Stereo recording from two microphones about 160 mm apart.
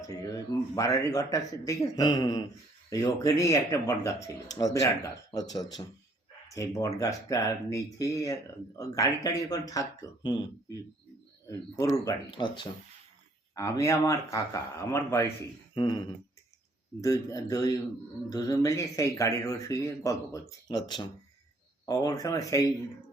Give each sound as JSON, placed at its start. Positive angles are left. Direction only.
{"t": 0.1, "sound": "speech", "side_deg": 20}
{"t": 5.8, "sound": "speech", "side_deg": 35}
{"t": 6.5, "sound": "speech", "side_deg": 20}
{"t": 15.7, "sound": "a sound", "side_deg": 30}
{"t": 17.0, "sound": "speech", "side_deg": 20}